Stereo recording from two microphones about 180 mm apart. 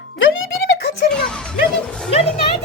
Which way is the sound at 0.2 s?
75° left (ahead or behind).